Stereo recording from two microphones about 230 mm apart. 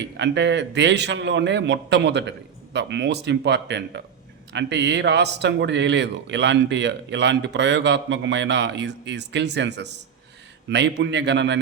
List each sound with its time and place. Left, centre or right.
0.0 s speech: right